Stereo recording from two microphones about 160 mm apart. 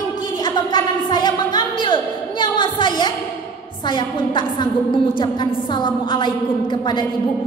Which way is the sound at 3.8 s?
30° left (ahead or behind).